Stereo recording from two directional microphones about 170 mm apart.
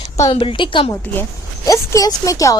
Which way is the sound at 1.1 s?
15° left (ahead or behind).